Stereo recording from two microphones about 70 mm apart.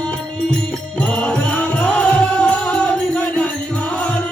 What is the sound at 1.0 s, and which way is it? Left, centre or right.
Music, centre.